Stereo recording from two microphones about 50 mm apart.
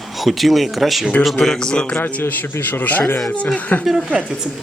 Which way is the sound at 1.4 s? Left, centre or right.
Centre.